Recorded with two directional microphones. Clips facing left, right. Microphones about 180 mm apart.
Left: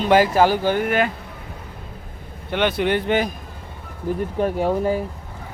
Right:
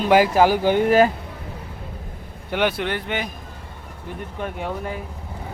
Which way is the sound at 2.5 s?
10° right (ahead or behind).